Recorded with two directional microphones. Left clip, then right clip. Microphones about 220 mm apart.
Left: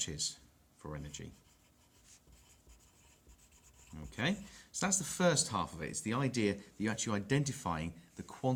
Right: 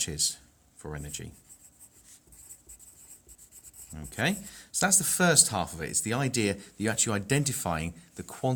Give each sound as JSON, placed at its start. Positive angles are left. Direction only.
{"t": 0.0, "sound": "speech", "side_deg": -45}
{"t": 3.9, "sound": "speech", "side_deg": -45}